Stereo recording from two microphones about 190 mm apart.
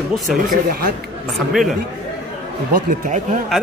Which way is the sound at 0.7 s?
50° right (ahead or behind).